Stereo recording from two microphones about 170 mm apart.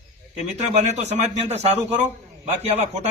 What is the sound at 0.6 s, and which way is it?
A man's voice, 40° right (ahead or behind).